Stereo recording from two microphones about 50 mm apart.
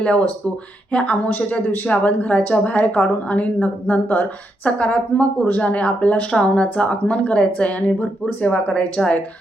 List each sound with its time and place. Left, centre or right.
0.0 s a woman's voice: left
9.0 s a woman's voice: centre